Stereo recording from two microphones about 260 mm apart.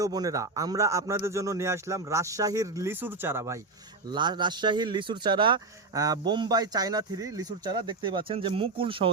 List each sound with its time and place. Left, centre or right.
0.0 s speech: centre